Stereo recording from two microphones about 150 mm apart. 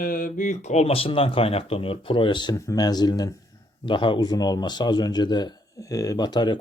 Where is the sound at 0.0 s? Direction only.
65° left (ahead or behind).